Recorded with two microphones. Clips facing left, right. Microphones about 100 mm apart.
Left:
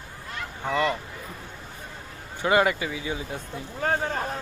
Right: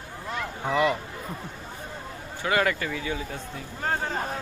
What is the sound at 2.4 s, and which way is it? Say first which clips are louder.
Speech: left 3 dB; 20° left (ahead or behind).